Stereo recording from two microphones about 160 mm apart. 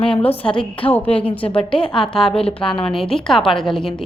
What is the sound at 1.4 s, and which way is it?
Speech, 35° left (ahead or behind).